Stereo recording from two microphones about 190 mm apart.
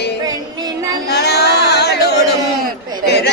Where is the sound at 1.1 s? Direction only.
60° left (ahead or behind).